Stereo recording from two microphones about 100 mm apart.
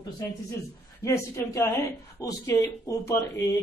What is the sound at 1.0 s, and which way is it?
Speech, 30° left (ahead or behind).